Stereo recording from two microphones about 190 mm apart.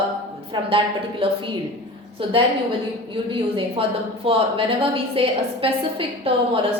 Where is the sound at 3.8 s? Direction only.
30° right (ahead or behind).